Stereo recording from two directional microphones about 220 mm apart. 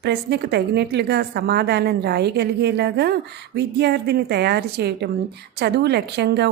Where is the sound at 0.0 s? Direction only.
50° right (ahead or behind).